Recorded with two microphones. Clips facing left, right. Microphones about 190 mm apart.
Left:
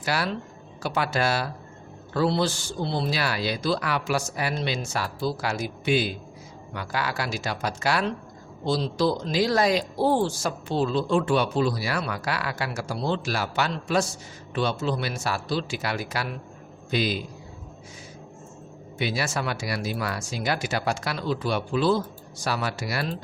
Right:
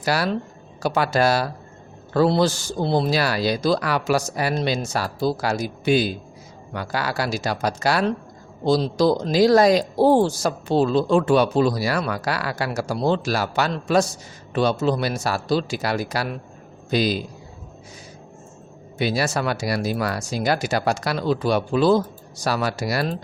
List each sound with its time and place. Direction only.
0.0 s speech: 40° right (ahead or behind)
18.9 s speech: 40° right (ahead or behind)